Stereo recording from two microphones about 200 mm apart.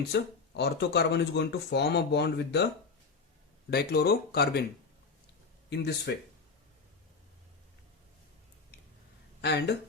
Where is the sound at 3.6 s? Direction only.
50° left (ahead or behind).